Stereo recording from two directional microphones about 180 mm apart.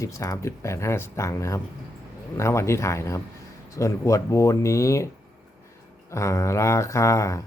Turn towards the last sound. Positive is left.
turn(degrees=15)  # may be behind; listen again after turning